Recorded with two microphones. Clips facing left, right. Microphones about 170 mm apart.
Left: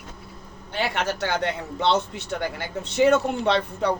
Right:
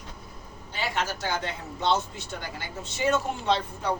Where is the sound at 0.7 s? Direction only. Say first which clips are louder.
Left 4 dB; 65° left (ahead or behind).